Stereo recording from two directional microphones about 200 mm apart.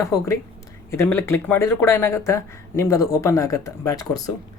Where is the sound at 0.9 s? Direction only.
10° left (ahead or behind).